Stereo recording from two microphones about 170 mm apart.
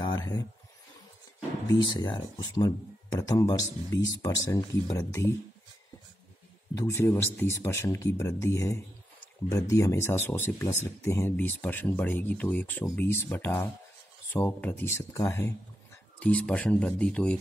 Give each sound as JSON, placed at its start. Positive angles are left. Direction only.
{"t": 0.0, "sound": "a sound", "side_deg": 20}
{"t": 1.9, "sound": "speech", "side_deg": 25}
{"t": 6.7, "sound": "speech", "side_deg": 15}